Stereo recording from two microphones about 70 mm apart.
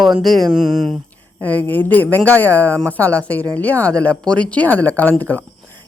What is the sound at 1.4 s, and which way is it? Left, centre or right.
Speech, left.